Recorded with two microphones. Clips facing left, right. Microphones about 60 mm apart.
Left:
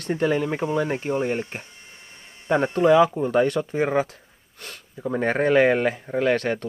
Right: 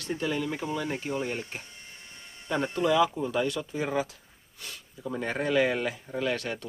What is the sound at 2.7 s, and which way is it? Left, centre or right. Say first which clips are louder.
Speech: left 7 dB; left.